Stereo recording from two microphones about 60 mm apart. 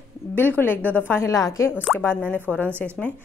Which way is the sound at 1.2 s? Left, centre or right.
Left.